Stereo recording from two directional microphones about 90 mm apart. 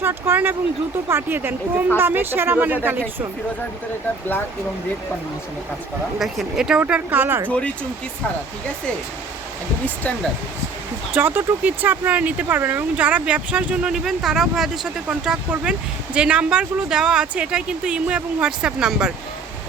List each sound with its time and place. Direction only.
0.0 s a woman's voice: 25° right (ahead or behind)
6.1 s speech: centre (ahead or behind)
6.8 s a woman's voice: 20° right (ahead or behind)
9.8 s speech: 20° left (ahead or behind)
11.1 s speech: 20° right (ahead or behind)